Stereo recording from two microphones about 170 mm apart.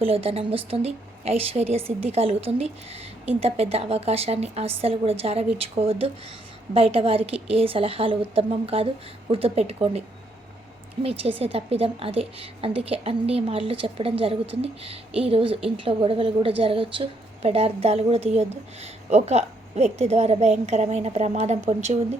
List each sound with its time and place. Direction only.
0.0 s a woman's voice: 35° right (ahead or behind)
11.0 s a woman's voice: 35° right (ahead or behind)